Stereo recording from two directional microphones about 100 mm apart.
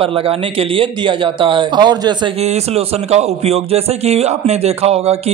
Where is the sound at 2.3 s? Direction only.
90° right.